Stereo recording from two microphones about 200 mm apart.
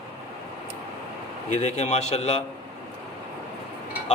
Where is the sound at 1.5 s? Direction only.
35° left (ahead or behind).